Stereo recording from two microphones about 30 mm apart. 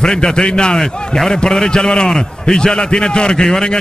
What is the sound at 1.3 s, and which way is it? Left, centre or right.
A man's voice, left.